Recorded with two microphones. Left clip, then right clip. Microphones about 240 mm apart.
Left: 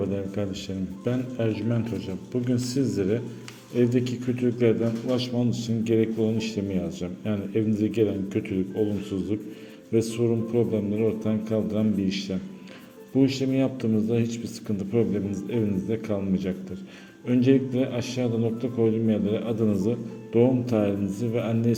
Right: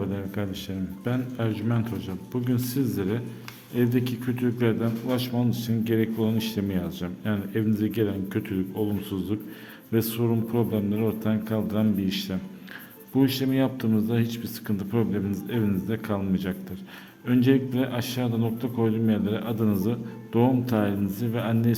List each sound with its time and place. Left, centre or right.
0.1 s a man's voice: centre